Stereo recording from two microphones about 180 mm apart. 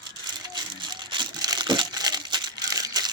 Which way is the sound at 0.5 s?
25° right (ahead or behind).